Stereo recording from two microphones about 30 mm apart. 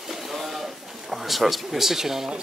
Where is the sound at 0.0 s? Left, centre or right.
Centre.